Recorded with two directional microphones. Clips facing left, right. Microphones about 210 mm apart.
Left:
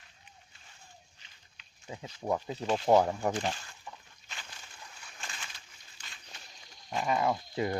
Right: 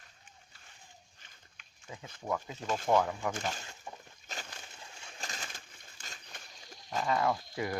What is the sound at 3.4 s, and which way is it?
Speech, 45° right (ahead or behind).